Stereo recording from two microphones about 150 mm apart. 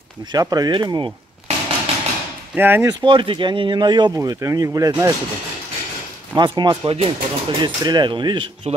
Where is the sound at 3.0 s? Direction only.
35° right (ahead or behind).